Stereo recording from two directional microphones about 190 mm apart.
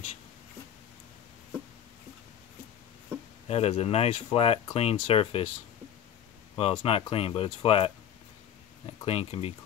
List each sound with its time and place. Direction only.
3.4 s speech: 35° left (ahead or behind)
6.5 s speech: 25° left (ahead or behind)
9.0 s speech: 30° left (ahead or behind)